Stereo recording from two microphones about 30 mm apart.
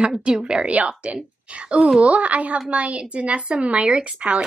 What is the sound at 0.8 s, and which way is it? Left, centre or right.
A woman's voice, right.